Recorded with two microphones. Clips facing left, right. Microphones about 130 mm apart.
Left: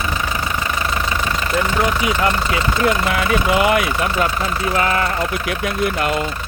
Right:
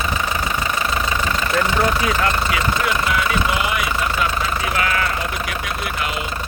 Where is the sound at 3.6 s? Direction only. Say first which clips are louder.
Left 7 dB; 55° left (ahead or behind).